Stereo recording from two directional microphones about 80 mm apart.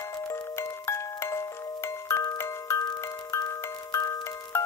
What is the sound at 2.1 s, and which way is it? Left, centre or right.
Music, left.